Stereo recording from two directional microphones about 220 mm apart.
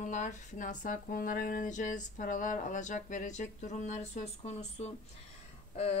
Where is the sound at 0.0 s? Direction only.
35° left (ahead or behind).